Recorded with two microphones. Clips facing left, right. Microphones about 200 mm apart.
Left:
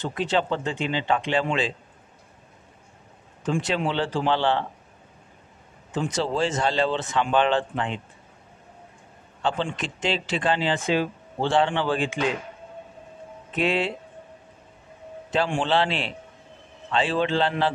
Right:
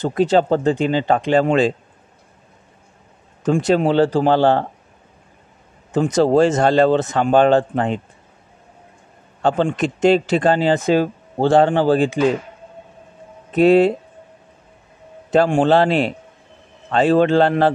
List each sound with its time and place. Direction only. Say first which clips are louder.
0.0 s speech: right 9 dB; 40° right (ahead or behind)
3.4 s speech: right 9 dB; 40° right (ahead or behind)
5.9 s speech: right 11 dB; 40° right (ahead or behind)
9.4 s speech: right 9 dB; 45° right (ahead or behind)
13.5 s speech: right 12 dB; 40° right (ahead or behind)
15.3 s speech: right 9 dB; 45° right (ahead or behind)